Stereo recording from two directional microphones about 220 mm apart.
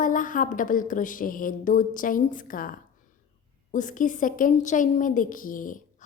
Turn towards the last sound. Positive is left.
turn(degrees=35)  # may be behind; listen again after turning